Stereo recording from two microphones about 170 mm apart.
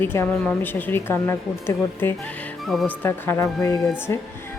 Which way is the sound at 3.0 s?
15° left (ahead or behind).